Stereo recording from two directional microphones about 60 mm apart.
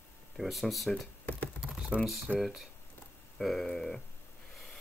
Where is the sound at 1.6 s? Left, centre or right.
Centre.